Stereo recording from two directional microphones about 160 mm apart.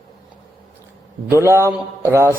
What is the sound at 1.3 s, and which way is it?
A man's voice, 15° right (ahead or behind).